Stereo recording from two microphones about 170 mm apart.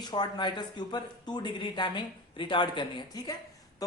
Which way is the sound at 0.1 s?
25° left (ahead or behind).